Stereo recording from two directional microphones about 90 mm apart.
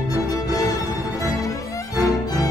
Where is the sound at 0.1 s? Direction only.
40° left (ahead or behind).